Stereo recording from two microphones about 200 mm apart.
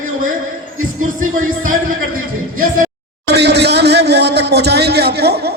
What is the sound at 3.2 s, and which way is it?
A man's voice, 55° right (ahead or behind).